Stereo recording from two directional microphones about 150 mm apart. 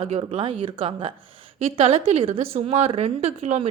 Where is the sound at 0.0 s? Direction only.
45° right (ahead or behind).